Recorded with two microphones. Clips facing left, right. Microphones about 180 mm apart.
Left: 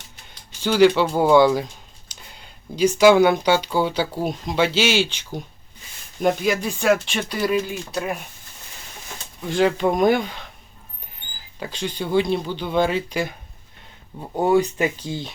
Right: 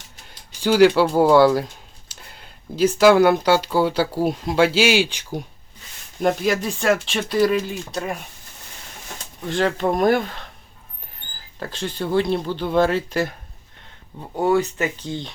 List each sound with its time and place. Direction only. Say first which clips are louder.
0.6 s speech: right 1 dB; 5° right (ahead or behind)
6.1 s speech: even; centre (ahead or behind)
9.5 s speech: left 2 dB; centre (ahead or behind)
11.6 s speech: right 1 dB; centre (ahead or behind)
14.2 s speech: left 1 dB; 15° left (ahead or behind)